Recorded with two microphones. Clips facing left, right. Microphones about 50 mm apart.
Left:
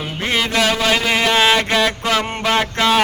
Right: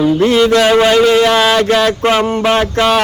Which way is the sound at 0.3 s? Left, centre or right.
Centre.